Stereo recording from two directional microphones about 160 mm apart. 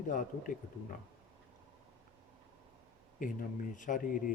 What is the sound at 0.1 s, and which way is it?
Speech, 55° left (ahead or behind).